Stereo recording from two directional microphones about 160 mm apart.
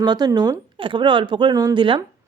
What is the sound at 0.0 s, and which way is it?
A woman's voice, 25° right (ahead or behind).